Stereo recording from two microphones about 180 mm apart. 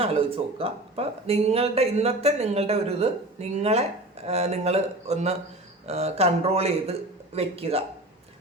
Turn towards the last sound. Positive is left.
turn(degrees=-35)  # may be behind; listen again after turning